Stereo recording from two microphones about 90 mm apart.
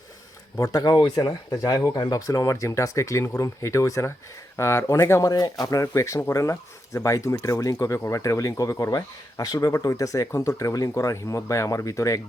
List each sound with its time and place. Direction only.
0.6 s speech: 45° left (ahead or behind)
1.5 s speech: 40° left (ahead or behind)
5.3 s speech: 45° left (ahead or behind)